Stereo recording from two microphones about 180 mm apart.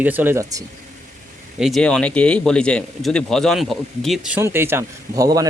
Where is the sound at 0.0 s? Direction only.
10° right (ahead or behind).